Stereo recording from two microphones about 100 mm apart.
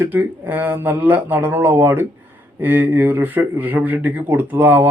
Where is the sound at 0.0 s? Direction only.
20° right (ahead or behind).